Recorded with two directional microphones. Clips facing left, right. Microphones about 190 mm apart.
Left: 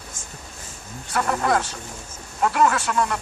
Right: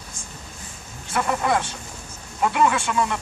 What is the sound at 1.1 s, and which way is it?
Speech, 5° right (ahead or behind).